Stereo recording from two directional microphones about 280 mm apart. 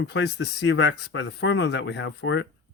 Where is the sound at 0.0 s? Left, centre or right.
Left.